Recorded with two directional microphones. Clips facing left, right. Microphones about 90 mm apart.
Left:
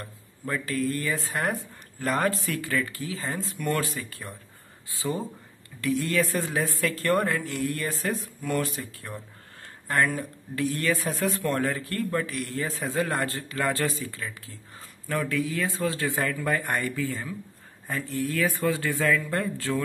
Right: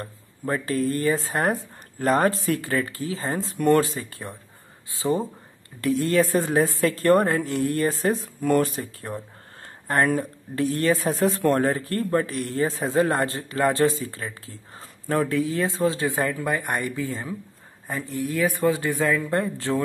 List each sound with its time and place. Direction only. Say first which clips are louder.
0.0 s a man's voice: right 5 dB; 30° right (ahead or behind)
5.8 s a man's voice: right 5 dB; 35° right (ahead or behind)